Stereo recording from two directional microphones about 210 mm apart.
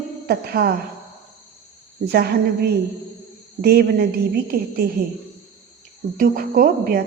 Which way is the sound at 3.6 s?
50° right (ahead or behind).